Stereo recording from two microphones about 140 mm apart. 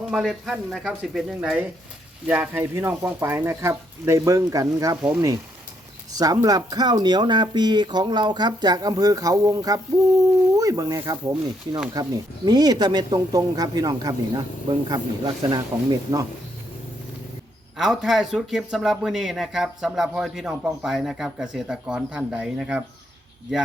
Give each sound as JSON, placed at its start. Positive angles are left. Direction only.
{"t": 0.1, "sound": "speech", "side_deg": -5}
{"t": 6.1, "sound": "speech", "side_deg": -25}
{"t": 17.7, "sound": "speech", "side_deg": -5}